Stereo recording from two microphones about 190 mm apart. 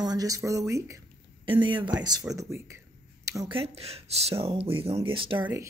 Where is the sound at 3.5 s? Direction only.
30° right (ahead or behind).